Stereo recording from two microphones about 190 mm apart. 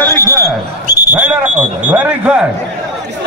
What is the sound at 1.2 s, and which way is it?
Speech, 10° right (ahead or behind).